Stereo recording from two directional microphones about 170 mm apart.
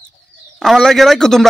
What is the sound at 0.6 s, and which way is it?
Speech, centre (ahead or behind).